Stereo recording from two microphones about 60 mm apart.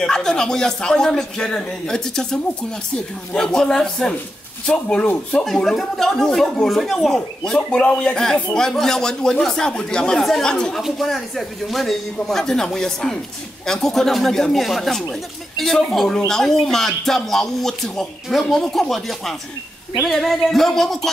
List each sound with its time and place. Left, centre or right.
0.0 s a man's voice: centre
5.4 s a man's voice: centre